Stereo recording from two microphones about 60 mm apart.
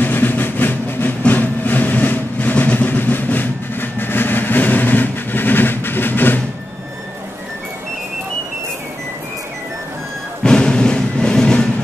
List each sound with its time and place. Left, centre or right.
0.0 s train: left
1.2 s vehicle: left
10.4 s music: centre